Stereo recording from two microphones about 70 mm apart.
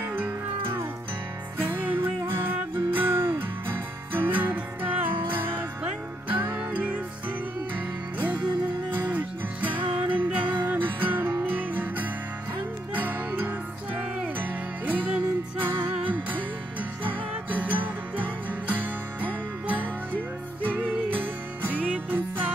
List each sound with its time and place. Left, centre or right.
0.0 s music: right
8.9 s music: right
21.7 s music: centre